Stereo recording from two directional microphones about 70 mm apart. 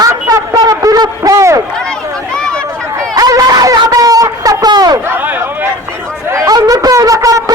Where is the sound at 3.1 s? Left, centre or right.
Right.